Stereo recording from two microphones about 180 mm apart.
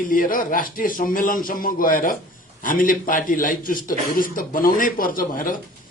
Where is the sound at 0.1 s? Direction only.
50° left (ahead or behind).